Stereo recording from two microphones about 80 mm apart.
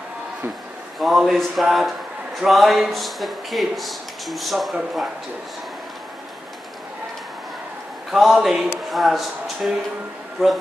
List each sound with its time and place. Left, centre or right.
0.9 s speech: centre
8.1 s speech: centre